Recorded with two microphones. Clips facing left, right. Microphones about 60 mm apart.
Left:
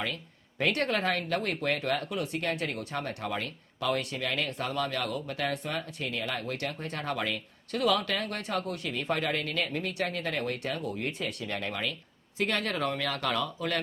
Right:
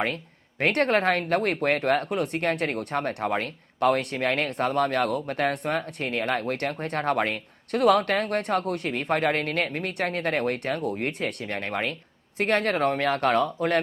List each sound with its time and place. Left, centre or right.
0.6 s speech: right